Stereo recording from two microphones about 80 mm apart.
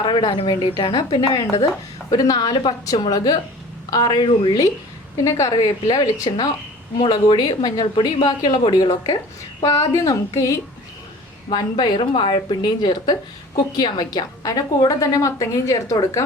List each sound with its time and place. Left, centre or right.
0.0 s a woman's voice: left
0.8 s a woman's voice: left
2.0 s a woman's voice: left
5.1 s a woman's voice: left
5.6 s a woman's voice: left
7.0 s speech: left
7.3 s speech: left
9.6 s a woman's voice: left
11.5 s a woman's voice: left